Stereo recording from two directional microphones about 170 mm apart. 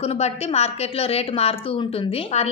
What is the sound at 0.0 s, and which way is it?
A woman's voice, 40° left (ahead or behind).